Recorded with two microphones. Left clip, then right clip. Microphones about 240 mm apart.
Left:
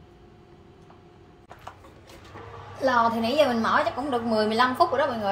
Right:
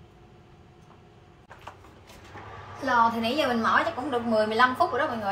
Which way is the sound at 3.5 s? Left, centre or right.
Left.